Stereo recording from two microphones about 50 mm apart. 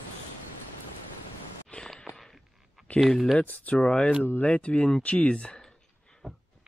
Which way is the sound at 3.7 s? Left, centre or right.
Centre.